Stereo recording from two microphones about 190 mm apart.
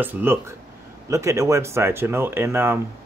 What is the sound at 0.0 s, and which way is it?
Speech, 10° right (ahead or behind).